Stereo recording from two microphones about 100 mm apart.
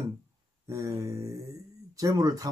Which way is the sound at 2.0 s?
35° right (ahead or behind).